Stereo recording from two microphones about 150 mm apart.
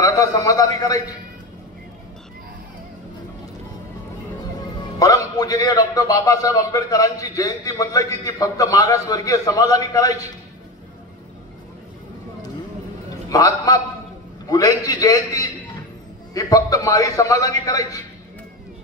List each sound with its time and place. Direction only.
0.0 s a man's voice: 20° left (ahead or behind)
4.9 s a man's voice: 25° left (ahead or behind)
13.3 s a man's voice: 25° left (ahead or behind)